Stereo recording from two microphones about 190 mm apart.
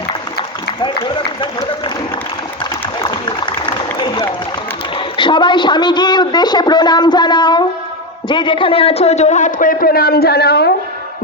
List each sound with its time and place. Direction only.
0.8 s speech: 25° left (ahead or behind)
3.0 s a sound: 25° left (ahead or behind)
4.9 s a woman's voice: 25° left (ahead or behind); by 10.7 s 55° left (ahead or behind)